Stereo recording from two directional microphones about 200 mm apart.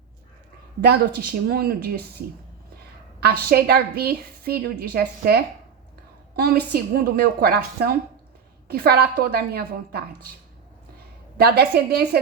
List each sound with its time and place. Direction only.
0.9 s a woman's voice: 50° right (ahead or behind)
3.2 s a woman's voice: 50° right (ahead or behind)
11.3 s a woman's voice: 50° right (ahead or behind)